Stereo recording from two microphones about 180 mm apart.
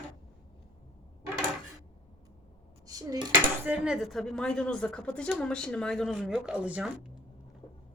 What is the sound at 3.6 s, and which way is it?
A woman's voice, 5° right (ahead or behind).